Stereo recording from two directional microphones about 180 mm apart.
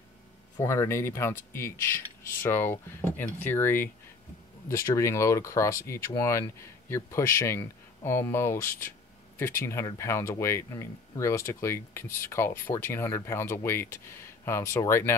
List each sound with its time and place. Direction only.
0.6 s speech: 15° left (ahead or behind)